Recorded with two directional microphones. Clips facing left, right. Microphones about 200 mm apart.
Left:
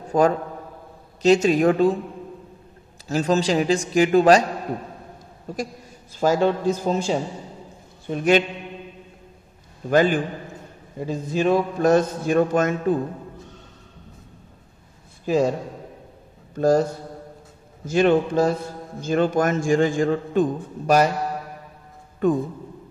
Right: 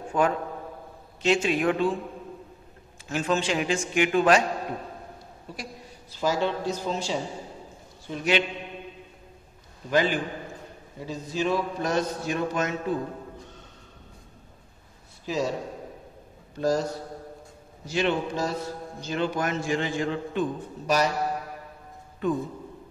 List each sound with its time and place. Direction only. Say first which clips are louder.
0.1 s speech: left 6 dB; 40° left (ahead or behind)
3.1 s speech: left 6 dB; 40° left (ahead or behind)
5.5 s a man's voice: left 10 dB; 45° left (ahead or behind)
9.8 s a man's voice: left 6 dB; 50° left (ahead or behind)
15.2 s a man's voice: left 8 dB; 50° left (ahead or behind)
16.5 s speech: left 7 dB; 50° left (ahead or behind)
17.8 s a man's voice: left 8 dB; 50° left (ahead or behind)
22.2 s a man's voice: left 6 dB; 50° left (ahead or behind)